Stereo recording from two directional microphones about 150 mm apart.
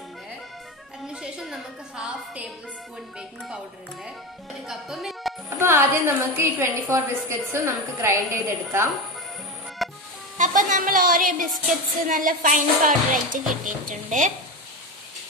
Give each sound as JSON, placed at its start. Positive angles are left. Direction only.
{"t": 1.0, "sound": "music", "side_deg": -5}
{"t": 3.2, "sound": "a woman's voice", "side_deg": -5}
{"t": 5.6, "sound": "a woman's voice", "side_deg": -15}
{"t": 9.8, "sound": "music", "side_deg": 0}
{"t": 10.3, "sound": "speech", "side_deg": -55}